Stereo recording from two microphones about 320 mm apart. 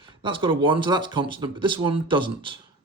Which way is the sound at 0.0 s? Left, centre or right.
Centre.